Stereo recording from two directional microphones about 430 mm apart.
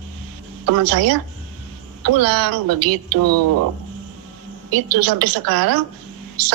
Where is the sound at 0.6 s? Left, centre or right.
Right.